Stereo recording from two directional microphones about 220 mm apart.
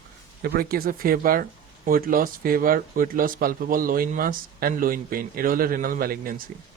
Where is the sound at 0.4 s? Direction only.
45° right (ahead or behind).